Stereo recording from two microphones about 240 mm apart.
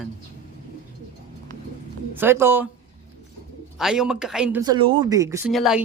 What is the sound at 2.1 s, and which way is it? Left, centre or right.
Speech, centre.